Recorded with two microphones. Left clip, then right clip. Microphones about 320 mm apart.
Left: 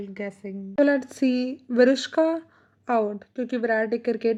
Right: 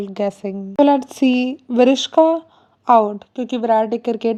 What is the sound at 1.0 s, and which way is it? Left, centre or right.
Speech, right.